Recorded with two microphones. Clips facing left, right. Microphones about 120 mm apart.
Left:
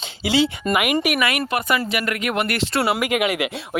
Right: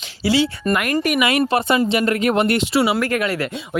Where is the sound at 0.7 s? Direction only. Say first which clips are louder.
Even; 10° left (ahead or behind).